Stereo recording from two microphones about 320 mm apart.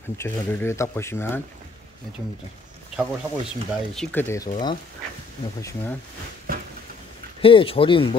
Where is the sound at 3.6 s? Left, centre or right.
Centre.